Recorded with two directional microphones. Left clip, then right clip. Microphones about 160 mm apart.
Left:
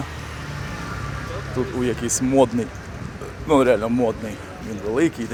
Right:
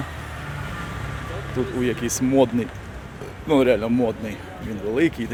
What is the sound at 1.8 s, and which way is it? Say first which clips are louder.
Speech: even; 20° right (ahead or behind).